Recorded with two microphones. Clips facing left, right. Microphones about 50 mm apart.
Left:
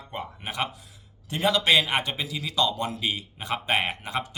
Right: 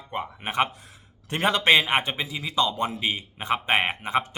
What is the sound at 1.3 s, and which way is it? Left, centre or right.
A man's voice, right.